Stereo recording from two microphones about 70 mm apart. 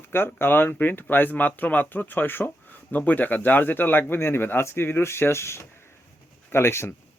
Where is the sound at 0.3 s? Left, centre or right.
Left.